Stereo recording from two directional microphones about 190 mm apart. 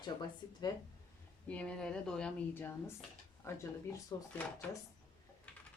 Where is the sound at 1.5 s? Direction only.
5° left (ahead or behind).